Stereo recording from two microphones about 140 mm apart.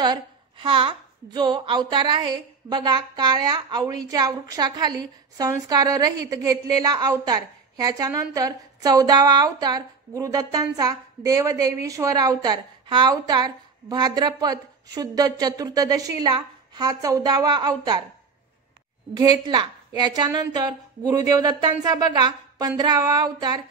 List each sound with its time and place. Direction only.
0.0 s a woman's voice: 35° right (ahead or behind)
19.1 s a woman's voice: 25° right (ahead or behind)